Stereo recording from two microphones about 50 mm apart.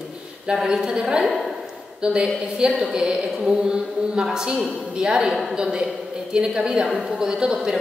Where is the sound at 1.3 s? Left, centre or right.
Centre.